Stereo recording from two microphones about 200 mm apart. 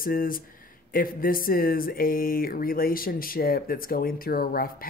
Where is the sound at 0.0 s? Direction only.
45° left (ahead or behind).